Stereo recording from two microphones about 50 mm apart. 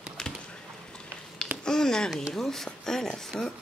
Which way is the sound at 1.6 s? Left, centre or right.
Centre.